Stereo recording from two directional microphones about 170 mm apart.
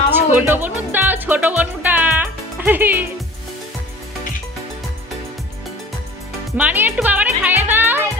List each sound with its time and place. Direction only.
0.2 s music: 10° right (ahead or behind)
6.6 s music: 10° right (ahead or behind)